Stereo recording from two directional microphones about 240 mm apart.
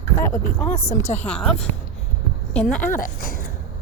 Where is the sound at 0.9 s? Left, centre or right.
Left.